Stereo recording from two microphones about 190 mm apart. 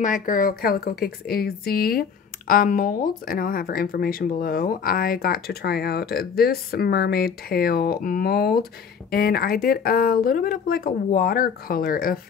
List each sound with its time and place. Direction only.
0.0 s a woman's voice: 45° left (ahead or behind)